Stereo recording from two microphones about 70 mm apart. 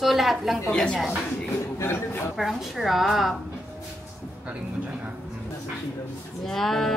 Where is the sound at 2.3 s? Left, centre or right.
Centre.